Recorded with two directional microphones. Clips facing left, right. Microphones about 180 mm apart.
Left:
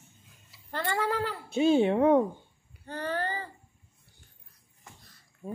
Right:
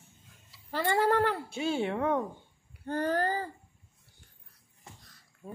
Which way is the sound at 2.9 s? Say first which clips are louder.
Right 4 dB; 45° right (ahead or behind).